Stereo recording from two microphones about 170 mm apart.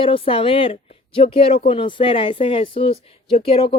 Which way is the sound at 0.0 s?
30° left (ahead or behind).